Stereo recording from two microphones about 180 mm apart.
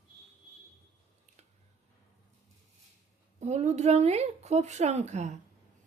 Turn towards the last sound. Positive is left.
turn(degrees=-40)  # may be behind; listen again after turning